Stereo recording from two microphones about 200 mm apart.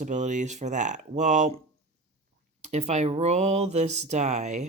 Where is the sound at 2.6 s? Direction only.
35° right (ahead or behind).